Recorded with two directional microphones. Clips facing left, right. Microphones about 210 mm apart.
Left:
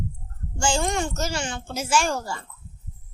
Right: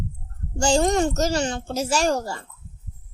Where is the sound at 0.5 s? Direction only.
40° right (ahead or behind).